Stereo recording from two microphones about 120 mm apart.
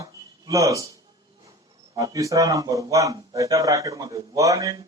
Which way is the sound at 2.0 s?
30° right (ahead or behind).